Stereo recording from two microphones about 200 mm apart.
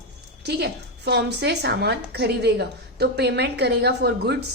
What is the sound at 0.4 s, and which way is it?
A woman's voice, 55° right (ahead or behind).